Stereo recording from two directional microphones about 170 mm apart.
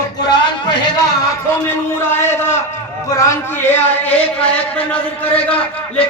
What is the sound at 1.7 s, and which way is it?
A man's voice, 15° left (ahead or behind).